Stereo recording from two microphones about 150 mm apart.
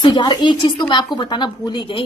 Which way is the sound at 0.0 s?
30° left (ahead or behind).